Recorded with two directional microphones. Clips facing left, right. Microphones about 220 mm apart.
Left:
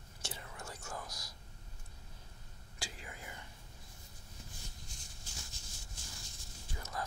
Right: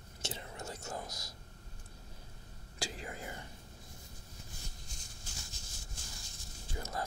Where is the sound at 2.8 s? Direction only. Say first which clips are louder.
Right 7 dB; 40° right (ahead or behind).